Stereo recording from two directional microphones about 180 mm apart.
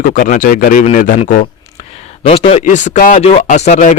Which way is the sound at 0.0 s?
50° left (ahead or behind).